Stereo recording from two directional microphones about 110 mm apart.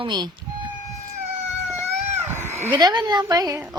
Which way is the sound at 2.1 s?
20° right (ahead or behind).